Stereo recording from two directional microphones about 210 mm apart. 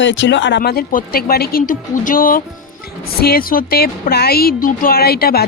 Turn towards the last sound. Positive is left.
turn(degrees=50)  # may be behind; listen again after turning